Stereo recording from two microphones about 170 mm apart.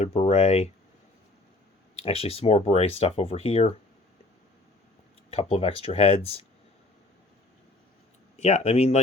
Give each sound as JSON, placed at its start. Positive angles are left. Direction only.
{"t": 0.0, "sound": "speech", "side_deg": 35}
{"t": 2.0, "sound": "speech", "side_deg": 35}
{"t": 5.3, "sound": "speech", "side_deg": 35}
{"t": 8.4, "sound": "speech", "side_deg": 40}